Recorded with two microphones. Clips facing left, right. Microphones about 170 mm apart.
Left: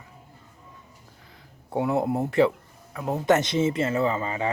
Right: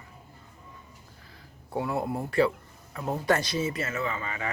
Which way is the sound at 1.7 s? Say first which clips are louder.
Left 5 dB; 20° left (ahead or behind).